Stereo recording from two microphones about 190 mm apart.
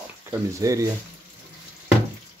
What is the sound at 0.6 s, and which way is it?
Speech, 15° right (ahead or behind).